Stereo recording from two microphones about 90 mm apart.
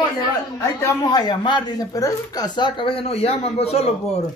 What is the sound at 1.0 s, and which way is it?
Speech, 50° left (ahead or behind).